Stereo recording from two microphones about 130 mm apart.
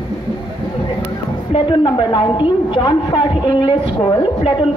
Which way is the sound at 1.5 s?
40° left (ahead or behind).